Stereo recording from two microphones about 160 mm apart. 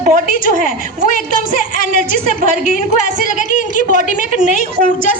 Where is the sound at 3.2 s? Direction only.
55° left (ahead or behind).